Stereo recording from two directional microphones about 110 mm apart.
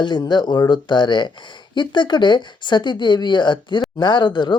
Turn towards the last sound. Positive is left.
turn(degrees=40)  # may be behind; listen again after turning